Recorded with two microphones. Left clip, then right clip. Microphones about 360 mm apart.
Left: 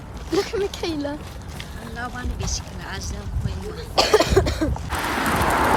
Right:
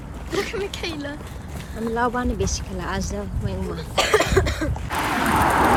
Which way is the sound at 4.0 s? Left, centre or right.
Centre.